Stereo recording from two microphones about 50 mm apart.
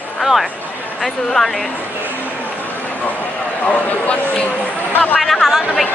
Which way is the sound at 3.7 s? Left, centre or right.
Left.